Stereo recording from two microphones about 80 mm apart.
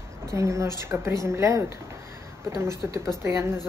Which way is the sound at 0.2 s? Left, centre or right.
Right.